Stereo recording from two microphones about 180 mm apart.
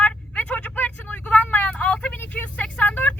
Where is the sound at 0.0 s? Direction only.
10° left (ahead or behind).